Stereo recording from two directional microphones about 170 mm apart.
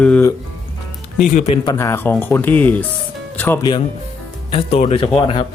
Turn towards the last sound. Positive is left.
turn(degrees=30)  # may be behind; listen again after turning